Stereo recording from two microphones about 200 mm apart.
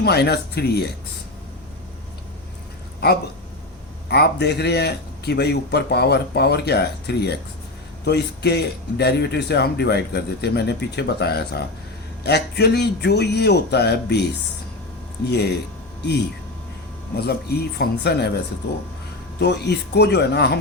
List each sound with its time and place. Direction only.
0.0 s a man's voice: 55° left (ahead or behind)
3.0 s a man's voice: 50° left (ahead or behind)
17.2 s a man's voice: 50° left (ahead or behind)
19.4 s a man's voice: 60° left (ahead or behind)